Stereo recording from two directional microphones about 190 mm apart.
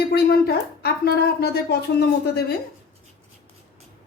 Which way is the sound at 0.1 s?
55° left (ahead or behind).